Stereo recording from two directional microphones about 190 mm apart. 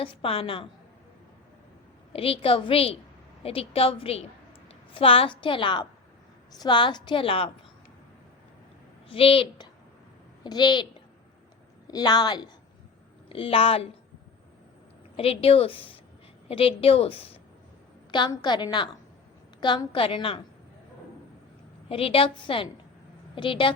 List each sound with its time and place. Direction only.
0.0 s a woman's voice: 30° left (ahead or behind)
2.1 s a woman's voice: 30° left (ahead or behind)
9.0 s a woman's voice: 30° left (ahead or behind)
11.9 s a woman's voice: 20° left (ahead or behind)
15.1 s a woman's voice: 30° left (ahead or behind)
21.8 s a woman's voice: 30° left (ahead or behind)